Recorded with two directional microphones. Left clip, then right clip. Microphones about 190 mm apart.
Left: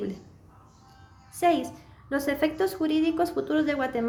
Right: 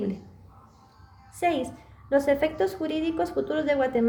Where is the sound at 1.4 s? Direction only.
15° left (ahead or behind).